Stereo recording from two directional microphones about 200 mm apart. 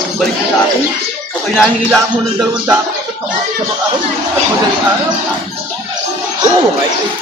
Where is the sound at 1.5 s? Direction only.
5° right (ahead or behind).